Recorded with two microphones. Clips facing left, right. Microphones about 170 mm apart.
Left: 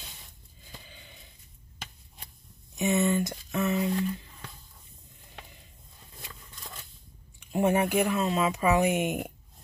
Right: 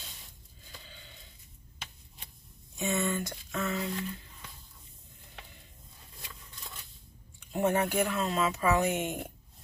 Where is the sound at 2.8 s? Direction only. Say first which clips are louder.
Left 6 dB; 20° left (ahead or behind).